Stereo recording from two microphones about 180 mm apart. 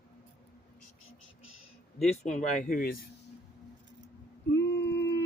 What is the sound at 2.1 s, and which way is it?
Speech, 40° left (ahead or behind).